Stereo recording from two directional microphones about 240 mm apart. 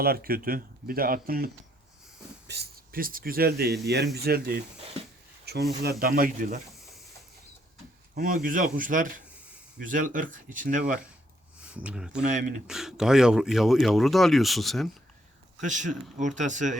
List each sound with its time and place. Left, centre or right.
0.0 s speech: right
2.5 s speech: right
5.8 s speech: right
8.1 s speech: right
11.7 s speech: centre
12.3 s speech: right
12.6 s speech: centre
15.6 s speech: right